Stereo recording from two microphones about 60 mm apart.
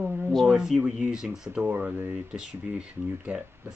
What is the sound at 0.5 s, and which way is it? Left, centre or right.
Speech, centre.